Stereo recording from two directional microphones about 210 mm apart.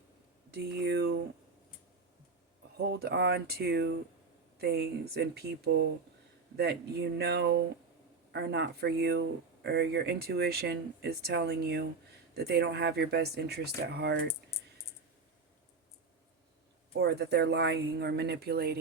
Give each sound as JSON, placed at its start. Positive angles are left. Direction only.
{"t": 0.5, "sound": "speech", "side_deg": -50}
{"t": 2.7, "sound": "speech", "side_deg": -50}
{"t": 7.2, "sound": "speech", "side_deg": -55}
{"t": 14.5, "sound": "a sound", "side_deg": 15}
{"t": 17.0, "sound": "speech", "side_deg": -50}